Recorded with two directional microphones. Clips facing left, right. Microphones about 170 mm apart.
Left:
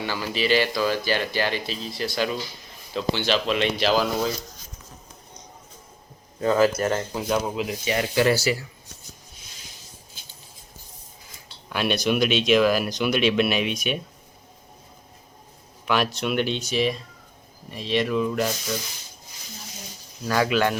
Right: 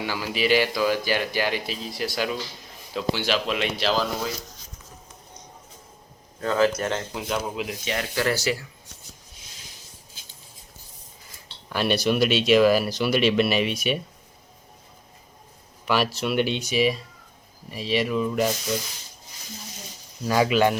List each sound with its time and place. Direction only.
0.0 s speech: 10° right (ahead or behind); by 4.1 s 5° left (ahead or behind)
6.4 s speech: 15° left (ahead or behind)
8.1 s speech: 15° left (ahead or behind)
8.4 s speech: 5° left (ahead or behind)
11.7 s speech: centre (ahead or behind)
15.9 s speech: 5° right (ahead or behind)
20.2 s speech: 10° right (ahead or behind)